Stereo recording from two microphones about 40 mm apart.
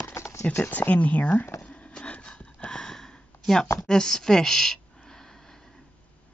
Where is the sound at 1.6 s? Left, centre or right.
Left; by 5.8 s centre.